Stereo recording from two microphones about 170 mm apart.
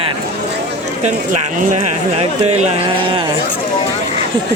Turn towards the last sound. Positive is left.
turn(degrees=-40)  # may be behind; listen again after turning